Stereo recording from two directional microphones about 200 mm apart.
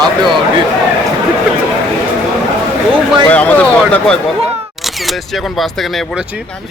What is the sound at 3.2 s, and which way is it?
Speech, 5° left (ahead or behind).